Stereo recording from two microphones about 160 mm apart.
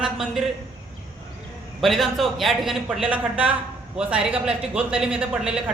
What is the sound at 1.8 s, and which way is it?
Speech, centre (ahead or behind).